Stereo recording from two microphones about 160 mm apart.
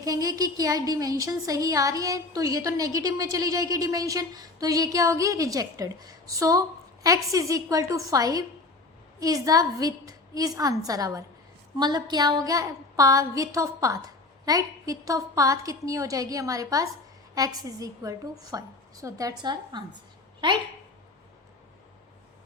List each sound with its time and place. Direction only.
0.0 s a woman's voice: 20° right (ahead or behind)